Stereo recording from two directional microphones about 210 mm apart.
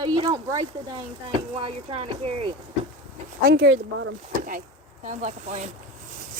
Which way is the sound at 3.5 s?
60° right (ahead or behind).